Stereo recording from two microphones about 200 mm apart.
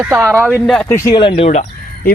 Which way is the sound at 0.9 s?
15° left (ahead or behind).